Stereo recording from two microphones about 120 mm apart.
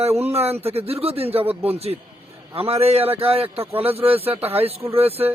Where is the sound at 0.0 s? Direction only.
60° right (ahead or behind).